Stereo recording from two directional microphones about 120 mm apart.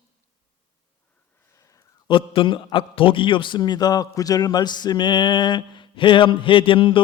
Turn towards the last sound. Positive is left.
turn(degrees=45)  # may be behind; listen again after turning